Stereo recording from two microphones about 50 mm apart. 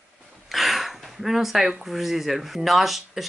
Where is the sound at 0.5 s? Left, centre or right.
Centre.